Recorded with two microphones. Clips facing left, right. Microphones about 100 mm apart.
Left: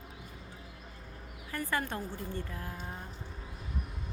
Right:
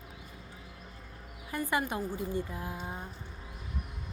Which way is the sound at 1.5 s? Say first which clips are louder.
Right 3 dB; 15° right (ahead or behind).